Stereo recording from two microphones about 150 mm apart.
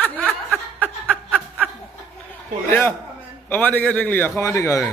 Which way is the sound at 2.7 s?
15° left (ahead or behind).